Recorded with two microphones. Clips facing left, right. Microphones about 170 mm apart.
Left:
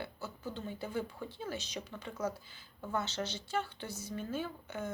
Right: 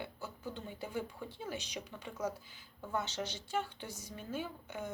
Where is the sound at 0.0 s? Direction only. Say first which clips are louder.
Left 1 dB; 15° right (ahead or behind).